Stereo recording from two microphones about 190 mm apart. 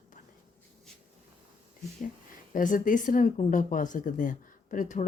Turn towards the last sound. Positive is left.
turn(degrees=40)  # may be behind; listen again after turning